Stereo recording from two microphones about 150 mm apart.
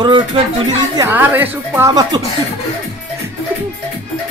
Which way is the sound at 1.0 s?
15° right (ahead or behind).